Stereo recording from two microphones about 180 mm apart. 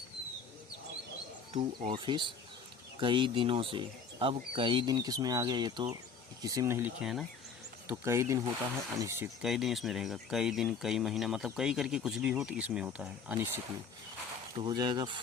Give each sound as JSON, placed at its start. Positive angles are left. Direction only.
{"t": 1.5, "sound": "speech", "side_deg": -35}
{"t": 7.9, "sound": "speech", "side_deg": -15}
{"t": 9.4, "sound": "speech", "side_deg": 0}
{"t": 14.5, "sound": "speech", "side_deg": -25}